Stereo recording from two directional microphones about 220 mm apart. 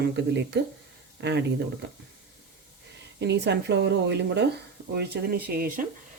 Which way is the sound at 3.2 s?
50° right (ahead or behind).